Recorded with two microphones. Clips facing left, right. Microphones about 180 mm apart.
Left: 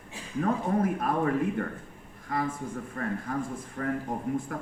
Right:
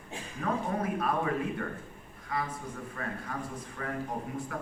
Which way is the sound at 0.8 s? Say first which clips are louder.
Left 4 dB; 45° left (ahead or behind).